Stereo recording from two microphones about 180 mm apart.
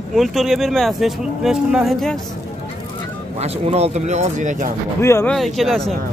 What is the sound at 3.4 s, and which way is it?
Speech, 35° right (ahead or behind).